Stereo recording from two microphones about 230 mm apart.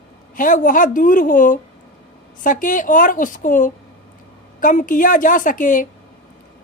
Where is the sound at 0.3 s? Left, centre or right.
Left.